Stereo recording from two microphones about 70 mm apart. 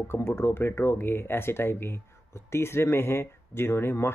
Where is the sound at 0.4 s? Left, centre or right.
Left.